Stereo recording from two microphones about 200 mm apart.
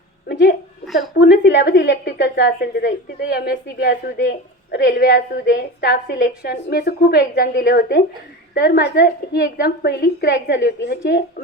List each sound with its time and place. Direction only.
0.3 s a woman's voice: 60° left (ahead or behind)
0.9 s a sound: centre (ahead or behind)
1.2 s a woman's voice: 60° left (ahead or behind)